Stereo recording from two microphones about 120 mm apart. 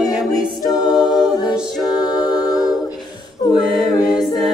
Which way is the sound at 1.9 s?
35° left (ahead or behind).